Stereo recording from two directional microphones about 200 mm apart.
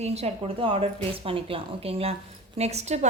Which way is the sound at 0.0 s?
30° right (ahead or behind).